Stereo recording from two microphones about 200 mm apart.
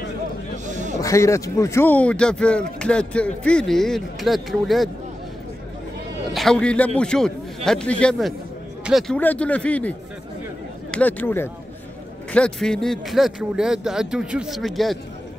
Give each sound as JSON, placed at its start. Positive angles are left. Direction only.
{"t": 0.7, "sound": "a sound", "side_deg": -35}
{"t": 1.0, "sound": "speech", "side_deg": 15}
{"t": 6.3, "sound": "a man's voice", "side_deg": 5}